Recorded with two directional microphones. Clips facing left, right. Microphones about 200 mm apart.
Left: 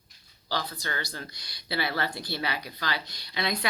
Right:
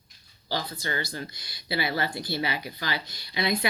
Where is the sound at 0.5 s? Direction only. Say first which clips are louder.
Right 2 dB; 20° right (ahead or behind).